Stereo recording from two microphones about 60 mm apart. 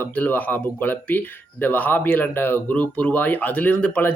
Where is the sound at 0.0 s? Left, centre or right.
Left.